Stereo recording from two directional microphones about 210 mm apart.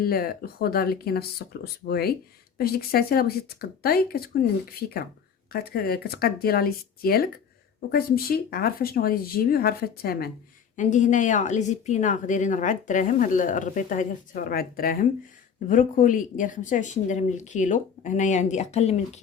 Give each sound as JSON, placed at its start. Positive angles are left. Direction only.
{"t": 0.0, "sound": "speech", "side_deg": 45}
{"t": 5.5, "sound": "a woman's voice", "side_deg": 45}